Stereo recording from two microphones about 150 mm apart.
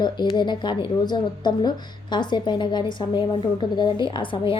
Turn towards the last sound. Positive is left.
turn(degrees=35)  # may be behind; listen again after turning